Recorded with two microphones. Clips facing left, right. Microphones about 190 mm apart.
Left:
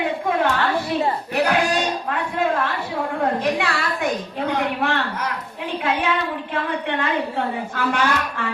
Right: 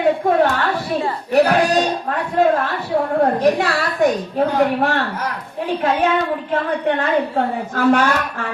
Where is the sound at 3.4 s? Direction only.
40° right (ahead or behind).